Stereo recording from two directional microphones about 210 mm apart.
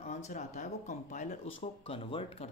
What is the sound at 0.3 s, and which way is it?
Speech, 35° left (ahead or behind).